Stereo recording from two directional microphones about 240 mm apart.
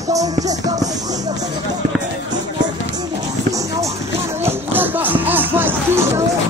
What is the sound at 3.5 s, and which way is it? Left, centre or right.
Music, centre.